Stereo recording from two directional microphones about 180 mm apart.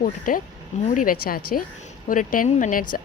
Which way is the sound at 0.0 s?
50° left (ahead or behind).